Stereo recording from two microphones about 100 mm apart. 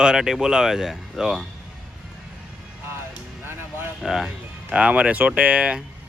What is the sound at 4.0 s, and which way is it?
Speech, 5° right (ahead or behind).